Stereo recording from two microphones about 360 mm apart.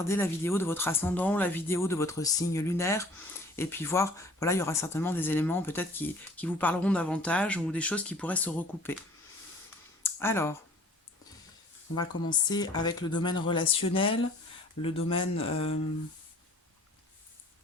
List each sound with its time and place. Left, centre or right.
0.0 s speech: centre
10.0 s speech: centre
11.9 s speech: centre